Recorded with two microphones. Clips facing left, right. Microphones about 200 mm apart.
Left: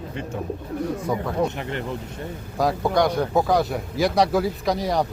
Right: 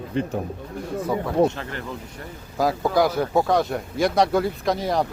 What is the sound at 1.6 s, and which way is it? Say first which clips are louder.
Speech: left 3 dB; 20° left (ahead or behind).